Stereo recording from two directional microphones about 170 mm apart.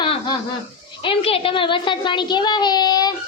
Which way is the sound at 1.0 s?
35° left (ahead or behind).